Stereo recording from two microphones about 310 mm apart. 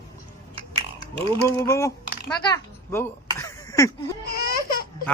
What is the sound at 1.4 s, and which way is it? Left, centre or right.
Speech, centre.